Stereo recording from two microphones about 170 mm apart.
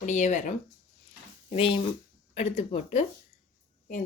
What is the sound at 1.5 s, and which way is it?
Speech, 35° left (ahead or behind).